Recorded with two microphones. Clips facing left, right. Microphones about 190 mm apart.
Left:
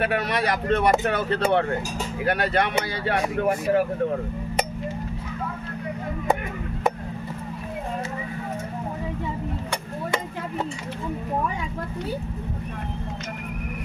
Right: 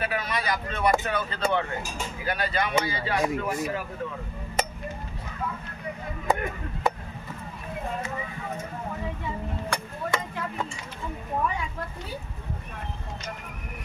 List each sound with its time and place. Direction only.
0.0 s speech: 65° left (ahead or behind)